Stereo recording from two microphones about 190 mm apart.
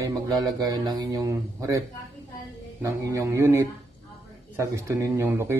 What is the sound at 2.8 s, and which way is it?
A man's voice, 15° right (ahead or behind).